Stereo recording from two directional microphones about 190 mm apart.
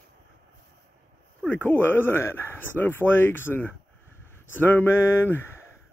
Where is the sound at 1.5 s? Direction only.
10° left (ahead or behind).